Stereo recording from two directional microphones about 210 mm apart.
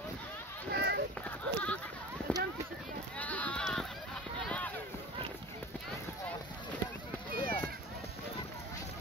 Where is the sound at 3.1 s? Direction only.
5° left (ahead or behind).